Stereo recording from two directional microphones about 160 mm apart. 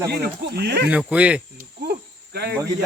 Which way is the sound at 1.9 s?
90° right.